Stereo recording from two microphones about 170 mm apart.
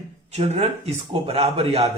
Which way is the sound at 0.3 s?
40° right (ahead or behind).